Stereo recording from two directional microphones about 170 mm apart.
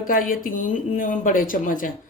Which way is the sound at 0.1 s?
55° left (ahead or behind).